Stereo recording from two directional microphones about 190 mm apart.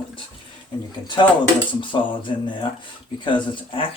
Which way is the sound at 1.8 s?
25° left (ahead or behind).